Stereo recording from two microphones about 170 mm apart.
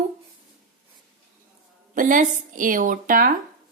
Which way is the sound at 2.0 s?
50° right (ahead or behind).